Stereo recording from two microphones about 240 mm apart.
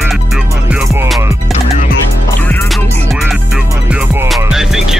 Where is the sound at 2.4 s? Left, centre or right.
Centre.